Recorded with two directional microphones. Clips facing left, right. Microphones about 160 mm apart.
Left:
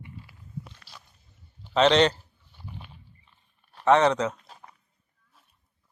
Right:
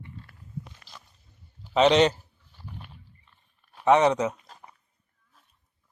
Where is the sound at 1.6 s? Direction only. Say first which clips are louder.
Right 1 dB; 10° right (ahead or behind).